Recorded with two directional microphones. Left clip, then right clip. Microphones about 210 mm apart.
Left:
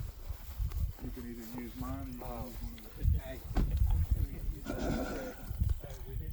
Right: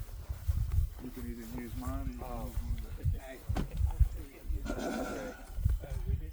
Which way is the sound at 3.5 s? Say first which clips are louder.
Even; 35° right (ahead or behind).